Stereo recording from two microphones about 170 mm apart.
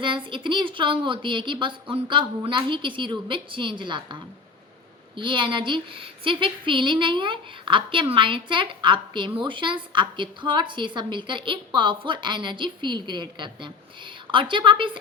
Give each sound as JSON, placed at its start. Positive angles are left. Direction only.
{"t": 0.0, "sound": "a woman's voice", "side_deg": -30}